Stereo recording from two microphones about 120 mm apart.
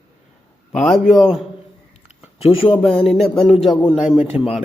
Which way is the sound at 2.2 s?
55° left (ahead or behind).